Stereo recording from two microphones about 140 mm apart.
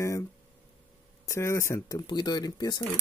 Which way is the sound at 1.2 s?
20° left (ahead or behind).